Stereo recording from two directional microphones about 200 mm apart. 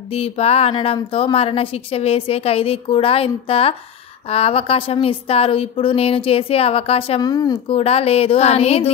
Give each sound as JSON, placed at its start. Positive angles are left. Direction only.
{"t": 0.1, "sound": "a woman's voice", "side_deg": 30}
{"t": 7.7, "sound": "a woman's voice", "side_deg": 30}